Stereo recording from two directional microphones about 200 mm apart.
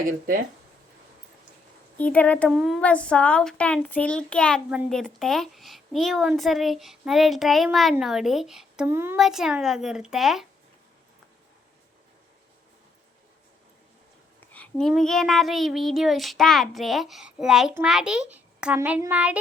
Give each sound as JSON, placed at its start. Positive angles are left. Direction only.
{"t": 0.0, "sound": "speech", "side_deg": -45}
{"t": 2.0, "sound": "a child's voice", "side_deg": 5}
{"t": 14.5, "sound": "a child's voice", "side_deg": 5}